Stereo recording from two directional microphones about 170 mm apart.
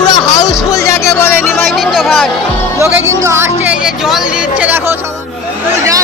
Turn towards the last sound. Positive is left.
turn(degrees=-5)  # may be behind; listen again after turning